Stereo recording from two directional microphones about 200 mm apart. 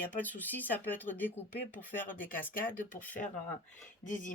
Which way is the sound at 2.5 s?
45° left (ahead or behind).